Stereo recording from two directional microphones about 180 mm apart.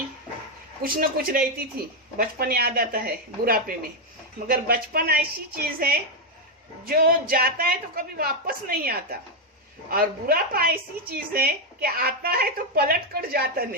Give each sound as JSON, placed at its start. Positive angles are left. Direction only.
{"t": 0.8, "sound": "speech", "side_deg": -55}